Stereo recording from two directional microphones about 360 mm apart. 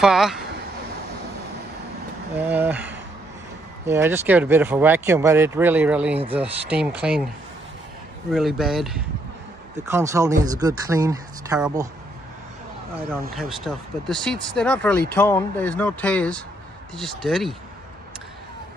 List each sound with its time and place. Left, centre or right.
0.0 s speech: centre
2.3 s speech: centre
6.1 s speech: centre
6.7 s speech: centre
8.3 s speech: centre
13.3 s speech: centre